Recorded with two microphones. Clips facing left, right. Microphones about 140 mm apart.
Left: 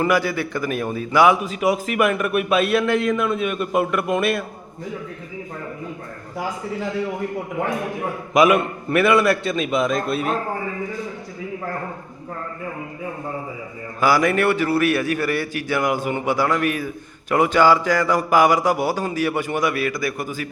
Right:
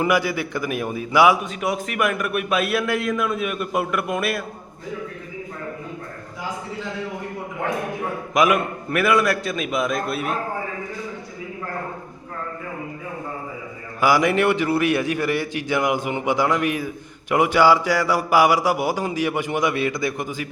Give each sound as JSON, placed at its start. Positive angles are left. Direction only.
{"t": 0.0, "sound": "a man's voice", "side_deg": -15}
{"t": 1.5, "sound": "a man's voice", "side_deg": 5}
{"t": 8.3, "sound": "a man's voice", "side_deg": 0}
{"t": 14.0, "sound": "a man's voice", "side_deg": -15}